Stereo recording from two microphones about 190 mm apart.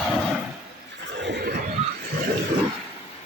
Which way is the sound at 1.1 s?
65° right (ahead or behind).